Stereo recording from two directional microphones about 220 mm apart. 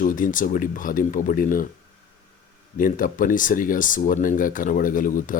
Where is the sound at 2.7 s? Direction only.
40° left (ahead or behind).